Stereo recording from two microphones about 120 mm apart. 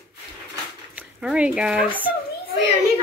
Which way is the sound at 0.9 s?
10° right (ahead or behind).